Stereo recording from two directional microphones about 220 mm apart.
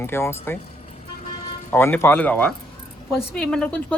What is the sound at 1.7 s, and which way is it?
A woman's voice, 10° left (ahead or behind).